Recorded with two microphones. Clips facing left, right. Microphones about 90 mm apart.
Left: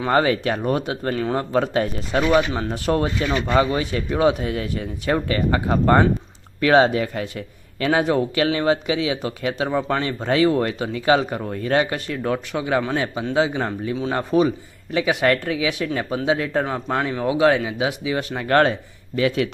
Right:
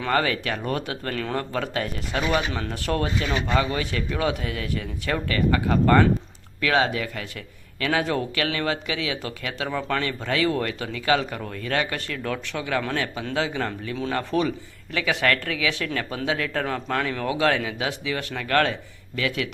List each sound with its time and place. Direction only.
0.0 s speech: 25° left (ahead or behind)